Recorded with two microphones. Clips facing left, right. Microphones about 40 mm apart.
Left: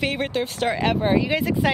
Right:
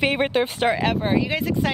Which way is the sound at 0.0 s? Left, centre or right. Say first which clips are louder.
Right 4 dB; centre.